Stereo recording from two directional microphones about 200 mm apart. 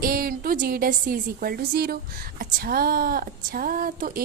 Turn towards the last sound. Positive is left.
turn(degrees=-45)  # may be behind; listen again after turning